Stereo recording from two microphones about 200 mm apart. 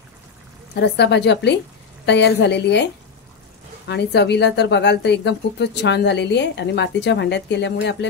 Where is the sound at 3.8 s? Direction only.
55° left (ahead or behind).